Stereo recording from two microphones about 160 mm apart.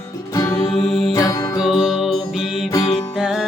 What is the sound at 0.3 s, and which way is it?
Music, 20° left (ahead or behind).